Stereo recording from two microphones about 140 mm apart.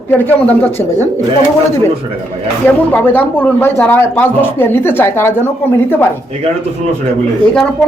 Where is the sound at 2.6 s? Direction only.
15° left (ahead or behind).